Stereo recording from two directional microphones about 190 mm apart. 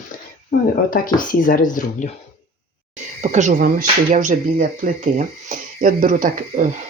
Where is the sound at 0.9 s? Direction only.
45° left (ahead or behind).